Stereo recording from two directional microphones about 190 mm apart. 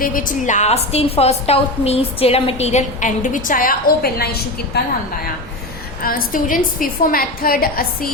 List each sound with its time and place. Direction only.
0.0 s a woman's voice: 45° left (ahead or behind)
6.0 s a woman's voice: 50° left (ahead or behind)